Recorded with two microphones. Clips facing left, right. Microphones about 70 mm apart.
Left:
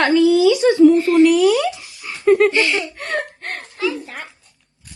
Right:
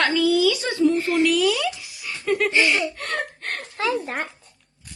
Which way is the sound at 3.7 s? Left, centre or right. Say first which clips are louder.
Even; right.